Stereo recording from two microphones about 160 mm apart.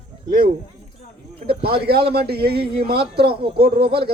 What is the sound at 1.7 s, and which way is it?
Speech, 80° right.